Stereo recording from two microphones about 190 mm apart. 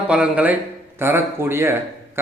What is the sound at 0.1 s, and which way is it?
A man's voice, 5° right (ahead or behind).